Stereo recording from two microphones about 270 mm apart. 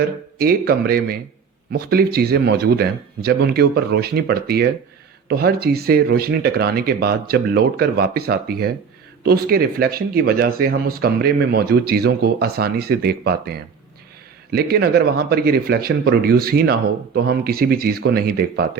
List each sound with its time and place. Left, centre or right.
0.3 s speech: right
14.5 s speech: right